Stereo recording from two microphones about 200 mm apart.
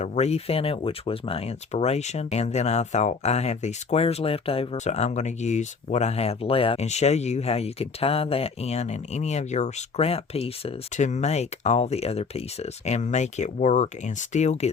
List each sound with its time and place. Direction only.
0.0 s speech: 35° left (ahead or behind)